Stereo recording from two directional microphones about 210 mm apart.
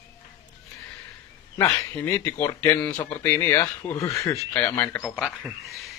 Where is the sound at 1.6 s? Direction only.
10° left (ahead or behind).